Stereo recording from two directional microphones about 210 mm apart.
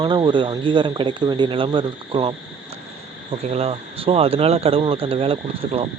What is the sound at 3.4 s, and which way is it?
Speech, 30° right (ahead or behind).